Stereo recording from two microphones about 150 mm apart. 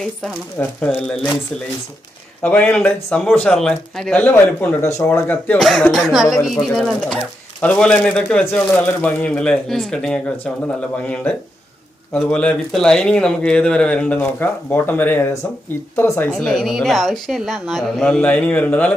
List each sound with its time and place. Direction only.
0.8 s speech: 5° left (ahead or behind)
2.4 s speech: 10° left (ahead or behind)
5.5 s speech: centre (ahead or behind)
16.3 s speech: centre (ahead or behind)